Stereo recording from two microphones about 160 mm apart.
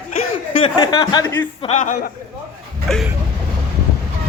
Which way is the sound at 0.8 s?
30° left (ahead or behind).